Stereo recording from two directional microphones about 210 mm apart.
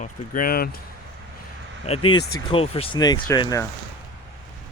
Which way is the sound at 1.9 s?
25° left (ahead or behind).